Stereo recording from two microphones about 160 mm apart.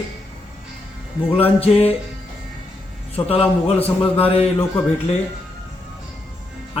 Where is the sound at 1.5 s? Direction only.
40° left (ahead or behind).